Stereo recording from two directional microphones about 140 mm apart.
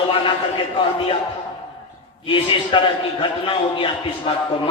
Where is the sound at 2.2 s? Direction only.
35° left (ahead or behind).